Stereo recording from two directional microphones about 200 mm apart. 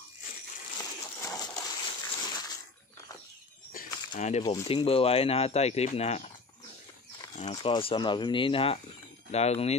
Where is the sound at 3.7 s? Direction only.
40° left (ahead or behind).